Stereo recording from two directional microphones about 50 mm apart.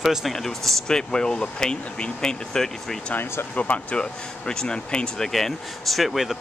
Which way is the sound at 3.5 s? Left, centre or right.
Left.